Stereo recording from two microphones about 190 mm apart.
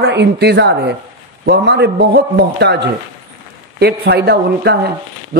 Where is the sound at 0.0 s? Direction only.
65° right (ahead or behind).